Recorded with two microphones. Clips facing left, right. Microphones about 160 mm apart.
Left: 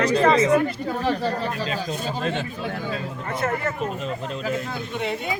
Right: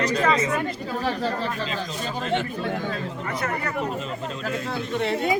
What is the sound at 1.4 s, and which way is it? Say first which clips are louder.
Speech: left 2 dB; 40° left (ahead or behind).